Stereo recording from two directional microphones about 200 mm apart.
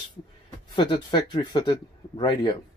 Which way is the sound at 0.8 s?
25° left (ahead or behind).